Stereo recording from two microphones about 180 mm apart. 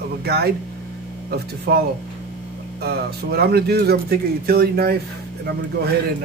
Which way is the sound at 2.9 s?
60° right (ahead or behind).